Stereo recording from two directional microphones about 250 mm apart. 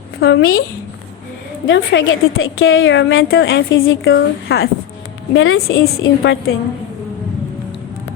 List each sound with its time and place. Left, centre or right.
0.2 s a woman's voice: left
1.6 s a woman's voice: left